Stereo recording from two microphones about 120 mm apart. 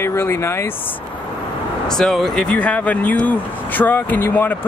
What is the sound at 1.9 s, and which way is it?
Speech, 5° left (ahead or behind).